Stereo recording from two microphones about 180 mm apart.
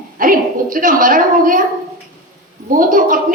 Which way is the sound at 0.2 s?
50° right (ahead or behind).